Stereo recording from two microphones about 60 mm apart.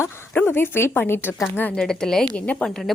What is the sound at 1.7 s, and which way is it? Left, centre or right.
Speech, centre.